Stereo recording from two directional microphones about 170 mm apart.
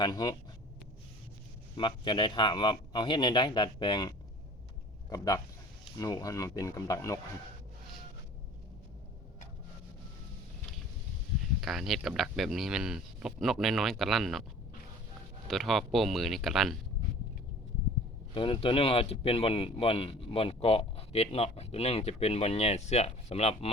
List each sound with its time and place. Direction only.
0.0 s speech: 25° left (ahead or behind)
1.7 s speech: 30° left (ahead or behind)
11.6 s speech: centre (ahead or behind)
15.4 s speech: centre (ahead or behind)
18.3 s speech: 30° left (ahead or behind)